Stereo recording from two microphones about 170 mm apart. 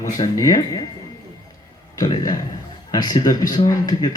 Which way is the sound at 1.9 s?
25° left (ahead or behind).